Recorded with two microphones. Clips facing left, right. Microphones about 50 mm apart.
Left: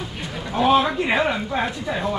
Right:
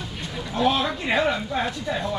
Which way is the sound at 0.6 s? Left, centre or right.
Centre.